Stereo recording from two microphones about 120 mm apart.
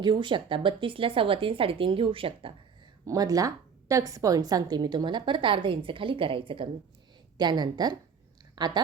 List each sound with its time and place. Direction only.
0.0 s speech: 40° right (ahead or behind)
3.1 s a woman's voice: 30° right (ahead or behind)